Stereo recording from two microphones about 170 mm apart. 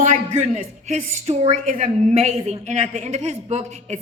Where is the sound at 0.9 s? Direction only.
40° right (ahead or behind).